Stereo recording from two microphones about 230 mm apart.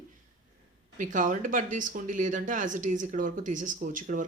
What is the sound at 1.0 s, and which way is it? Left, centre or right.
Speech, right.